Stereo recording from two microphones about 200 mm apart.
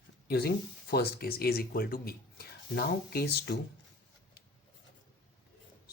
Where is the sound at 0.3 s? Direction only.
55° left (ahead or behind).